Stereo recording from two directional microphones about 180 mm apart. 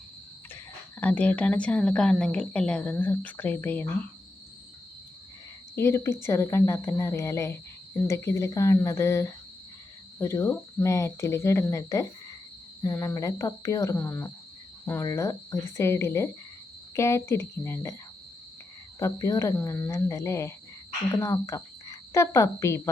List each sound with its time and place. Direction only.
0.5 s speech: 10° left (ahead or behind)
5.7 s speech: 15° left (ahead or behind)
18.9 s speech: 15° left (ahead or behind)